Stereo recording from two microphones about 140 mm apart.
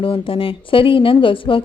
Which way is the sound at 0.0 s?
40° left (ahead or behind).